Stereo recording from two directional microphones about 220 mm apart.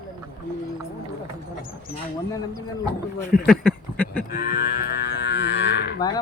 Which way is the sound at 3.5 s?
5° left (ahead or behind).